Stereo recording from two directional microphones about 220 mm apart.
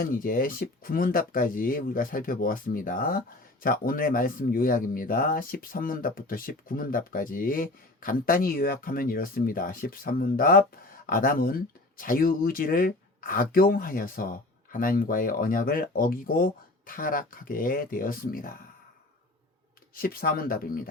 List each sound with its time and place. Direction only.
0.0 s speech: 40° left (ahead or behind)
19.9 s speech: 40° left (ahead or behind)